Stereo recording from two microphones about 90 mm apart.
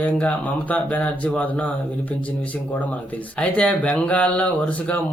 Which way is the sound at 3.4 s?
15° left (ahead or behind).